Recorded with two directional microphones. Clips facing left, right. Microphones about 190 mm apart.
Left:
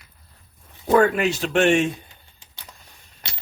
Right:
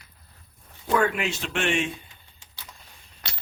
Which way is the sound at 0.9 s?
40° left (ahead or behind).